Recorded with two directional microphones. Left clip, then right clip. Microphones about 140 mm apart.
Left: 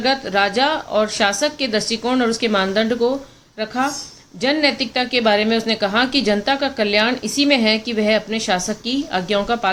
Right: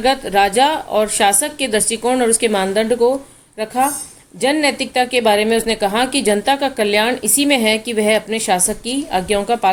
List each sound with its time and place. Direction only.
0.0 s a woman's voice: 40° right (ahead or behind)